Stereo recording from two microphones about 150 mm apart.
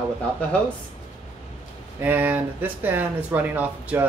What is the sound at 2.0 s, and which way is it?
Speech, 10° right (ahead or behind).